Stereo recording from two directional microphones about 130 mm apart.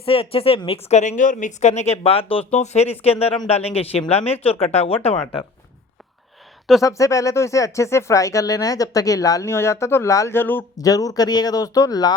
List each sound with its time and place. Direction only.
0.0 s a woman's voice: 45° left (ahead or behind)
6.8 s speech: 25° left (ahead or behind)
10.8 s speech: 30° left (ahead or behind)